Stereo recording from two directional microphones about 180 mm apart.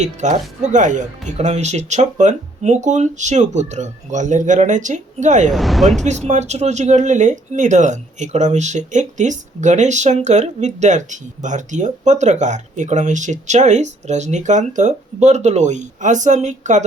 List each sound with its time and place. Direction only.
0.0 s speech: 40° right (ahead or behind)
5.5 s speech: centre (ahead or behind)
6.0 s speech: 40° right (ahead or behind)